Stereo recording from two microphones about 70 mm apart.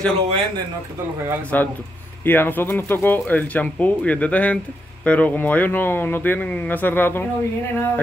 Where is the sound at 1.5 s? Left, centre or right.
Left.